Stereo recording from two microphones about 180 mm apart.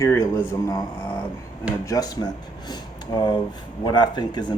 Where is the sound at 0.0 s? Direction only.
15° left (ahead or behind).